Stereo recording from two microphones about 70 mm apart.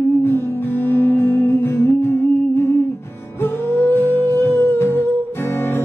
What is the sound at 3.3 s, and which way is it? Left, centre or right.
Music, left.